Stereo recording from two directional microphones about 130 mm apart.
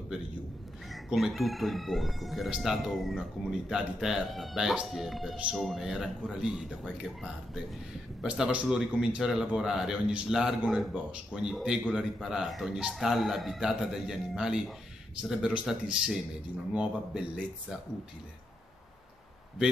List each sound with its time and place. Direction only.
0.9 s speech: centre (ahead or behind)
8.2 s speech: 5° right (ahead or behind)